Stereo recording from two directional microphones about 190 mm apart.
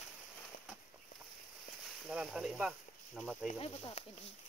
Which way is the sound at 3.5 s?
30° left (ahead or behind).